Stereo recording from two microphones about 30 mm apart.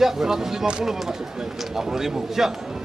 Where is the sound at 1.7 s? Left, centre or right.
Centre.